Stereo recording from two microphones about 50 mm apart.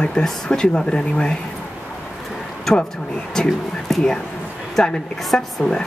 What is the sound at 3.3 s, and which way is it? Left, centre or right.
Speech, centre.